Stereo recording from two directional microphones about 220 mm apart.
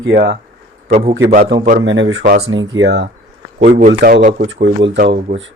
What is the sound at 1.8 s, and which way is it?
Speech, 55° right (ahead or behind).